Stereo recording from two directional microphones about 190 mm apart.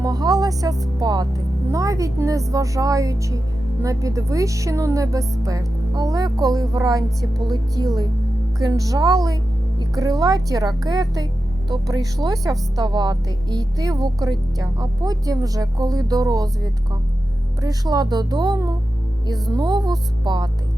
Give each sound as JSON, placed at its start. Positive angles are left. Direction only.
{"t": 0.0, "sound": "speech", "side_deg": -20}
{"t": 17.6, "sound": "speech", "side_deg": -20}